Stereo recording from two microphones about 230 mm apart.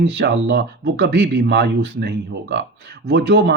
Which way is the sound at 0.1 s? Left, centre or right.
Right.